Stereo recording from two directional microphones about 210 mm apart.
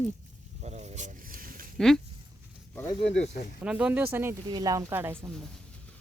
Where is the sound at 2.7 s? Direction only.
10° left (ahead or behind).